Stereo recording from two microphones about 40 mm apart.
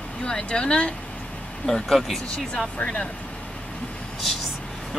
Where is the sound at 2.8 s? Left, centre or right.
Left.